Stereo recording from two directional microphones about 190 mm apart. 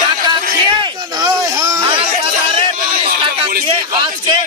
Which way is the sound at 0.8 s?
25° right (ahead or behind).